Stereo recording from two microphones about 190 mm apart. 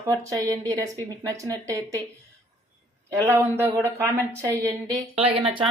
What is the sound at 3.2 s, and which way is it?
Speech, 10° right (ahead or behind).